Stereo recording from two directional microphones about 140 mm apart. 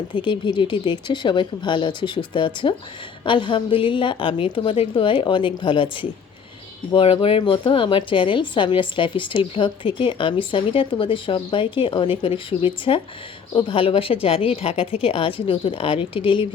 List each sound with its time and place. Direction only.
0.1 s a woman's voice: 35° left (ahead or behind)